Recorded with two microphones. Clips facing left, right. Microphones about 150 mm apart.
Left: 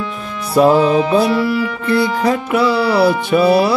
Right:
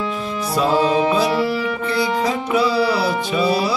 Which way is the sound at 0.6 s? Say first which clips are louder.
Left 6 dB; 55° left (ahead or behind).